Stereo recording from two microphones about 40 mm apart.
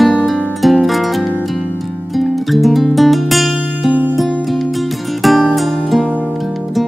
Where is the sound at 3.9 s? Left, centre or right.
Right.